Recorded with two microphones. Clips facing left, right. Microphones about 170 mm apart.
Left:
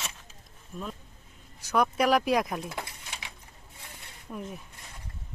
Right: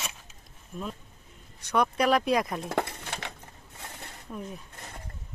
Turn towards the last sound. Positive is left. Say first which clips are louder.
# even
turn(degrees=5)  # may be behind; listen again after turning